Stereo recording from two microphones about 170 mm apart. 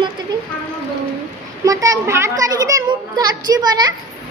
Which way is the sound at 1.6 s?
20° right (ahead or behind).